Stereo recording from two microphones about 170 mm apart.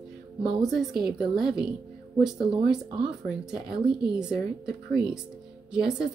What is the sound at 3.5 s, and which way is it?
Speech, 5° right (ahead or behind).